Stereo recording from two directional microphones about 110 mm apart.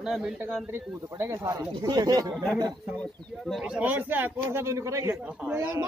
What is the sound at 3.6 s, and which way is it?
Speech, 10° right (ahead or behind).